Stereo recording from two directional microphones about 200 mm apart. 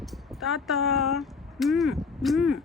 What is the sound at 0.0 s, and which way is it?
Speech, centre (ahead or behind).